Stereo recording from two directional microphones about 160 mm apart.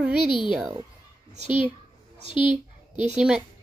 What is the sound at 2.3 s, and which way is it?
Speech, 30° left (ahead or behind).